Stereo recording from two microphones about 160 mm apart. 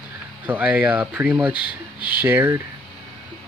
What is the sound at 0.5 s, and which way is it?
Speech, 10° right (ahead or behind).